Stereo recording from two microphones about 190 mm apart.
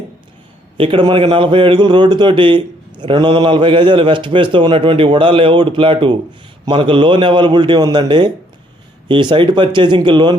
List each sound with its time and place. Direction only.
0.8 s speech: 25° right (ahead or behind)